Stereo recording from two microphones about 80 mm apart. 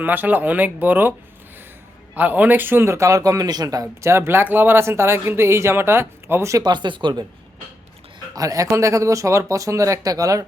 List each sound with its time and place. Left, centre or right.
0.0 s speech: right
2.1 s speech: right
4.1 s speech: right
6.6 s speech: right
8.4 s speech: right